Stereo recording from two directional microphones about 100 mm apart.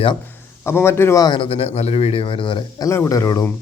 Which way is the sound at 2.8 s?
30° left (ahead or behind).